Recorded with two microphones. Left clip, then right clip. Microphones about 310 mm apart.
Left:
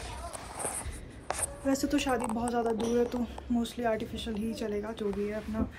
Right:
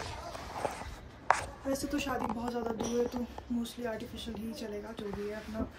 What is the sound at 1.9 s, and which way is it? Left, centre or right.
Speech, left.